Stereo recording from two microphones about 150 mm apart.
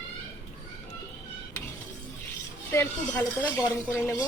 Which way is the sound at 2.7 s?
15° left (ahead or behind).